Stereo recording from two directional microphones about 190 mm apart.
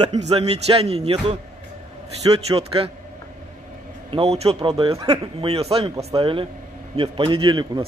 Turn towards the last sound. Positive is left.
turn(degrees=-25)  # may be behind; listen again after turning